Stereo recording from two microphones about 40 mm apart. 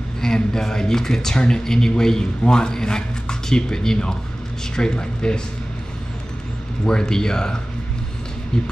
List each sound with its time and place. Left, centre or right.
0.2 s speech: centre
6.9 s speech: centre